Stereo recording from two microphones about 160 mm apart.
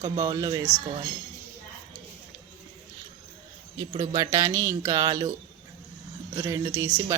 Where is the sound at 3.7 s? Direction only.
25° right (ahead or behind).